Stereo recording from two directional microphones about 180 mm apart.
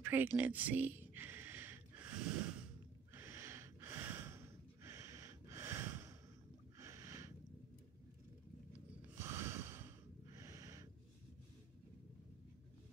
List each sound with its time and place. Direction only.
0.0 s a sound: 10° right (ahead or behind)
3.2 s snort: 15° right (ahead or behind)
9.2 s snort: 15° right (ahead or behind)